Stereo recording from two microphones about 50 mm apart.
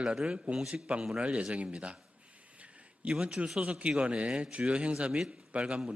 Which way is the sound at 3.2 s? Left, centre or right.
Right.